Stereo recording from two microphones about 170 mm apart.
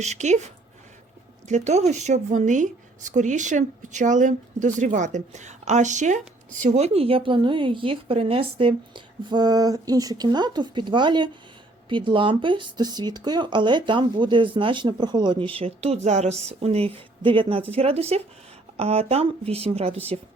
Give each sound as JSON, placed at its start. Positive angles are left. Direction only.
{"t": 0.0, "sound": "a woman's voice", "side_deg": -40}